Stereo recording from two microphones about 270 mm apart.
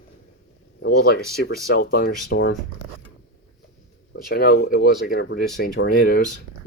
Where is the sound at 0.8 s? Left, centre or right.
Left.